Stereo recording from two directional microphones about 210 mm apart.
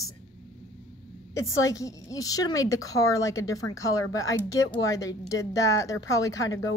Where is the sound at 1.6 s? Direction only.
15° left (ahead or behind).